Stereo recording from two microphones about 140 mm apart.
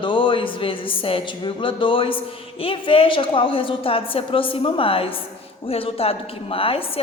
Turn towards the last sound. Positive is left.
turn(degrees=40)  # may be behind; listen again after turning